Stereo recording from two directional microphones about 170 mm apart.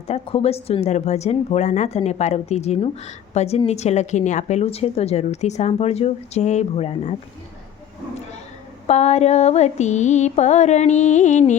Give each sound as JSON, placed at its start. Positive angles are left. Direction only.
{"t": 0.1, "sound": "speech", "side_deg": 35}
{"t": 8.9, "sound": "mantra", "side_deg": 40}